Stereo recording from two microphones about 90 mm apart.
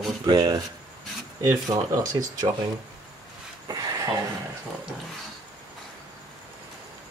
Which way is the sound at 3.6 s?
45° right (ahead or behind).